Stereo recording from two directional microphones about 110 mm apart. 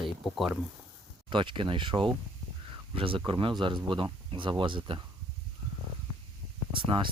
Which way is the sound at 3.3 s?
50° right (ahead or behind).